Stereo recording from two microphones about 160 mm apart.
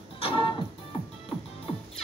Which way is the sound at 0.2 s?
30° left (ahead or behind).